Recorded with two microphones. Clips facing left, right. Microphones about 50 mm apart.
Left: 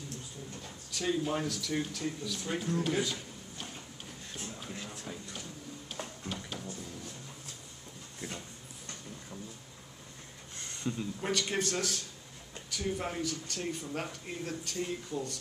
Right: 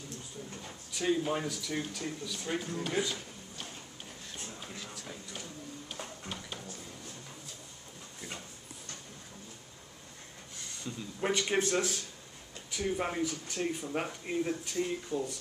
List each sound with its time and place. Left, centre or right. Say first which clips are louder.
0.6 s speech: right 1 dB; centre
4.3 s a sound: left 2 dB; centre
5.9 s printer: left 4 dB; centre
11.1 s a man's voice: right 6 dB; centre